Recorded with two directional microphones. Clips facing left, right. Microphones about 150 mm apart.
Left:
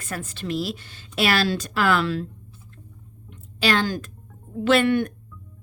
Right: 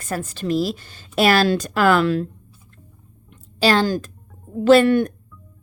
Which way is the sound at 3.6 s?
35° right (ahead or behind).